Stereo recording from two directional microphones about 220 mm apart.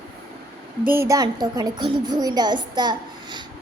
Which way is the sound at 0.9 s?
15° right (ahead or behind).